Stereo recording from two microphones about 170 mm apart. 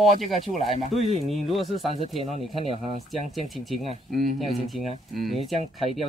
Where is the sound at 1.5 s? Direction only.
Centre (ahead or behind).